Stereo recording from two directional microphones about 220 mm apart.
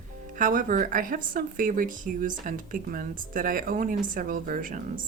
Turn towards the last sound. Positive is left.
turn(degrees=-40)  # may be behind; listen again after turning